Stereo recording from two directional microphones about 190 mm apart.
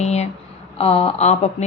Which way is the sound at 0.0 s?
35° left (ahead or behind).